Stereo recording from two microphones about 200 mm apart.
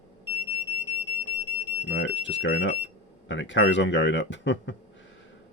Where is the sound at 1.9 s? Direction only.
65° left (ahead or behind).